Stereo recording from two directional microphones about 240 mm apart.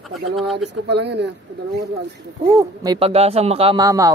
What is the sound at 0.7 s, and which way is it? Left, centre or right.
Speech, right.